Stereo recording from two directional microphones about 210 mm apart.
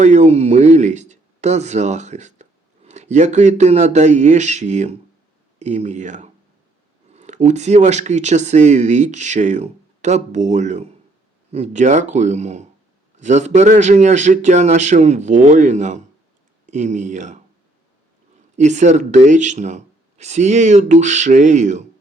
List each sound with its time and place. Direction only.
0.0 s speech: 35° right (ahead or behind)
18.5 s speech: 35° right (ahead or behind)